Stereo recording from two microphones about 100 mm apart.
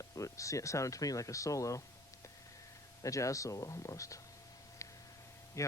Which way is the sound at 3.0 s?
35° left (ahead or behind).